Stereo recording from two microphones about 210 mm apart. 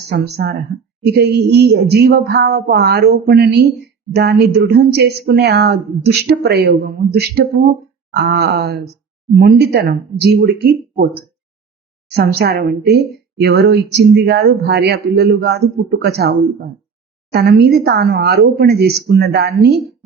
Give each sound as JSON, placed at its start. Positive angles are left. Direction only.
{"t": 0.1, "sound": "speech", "side_deg": -50}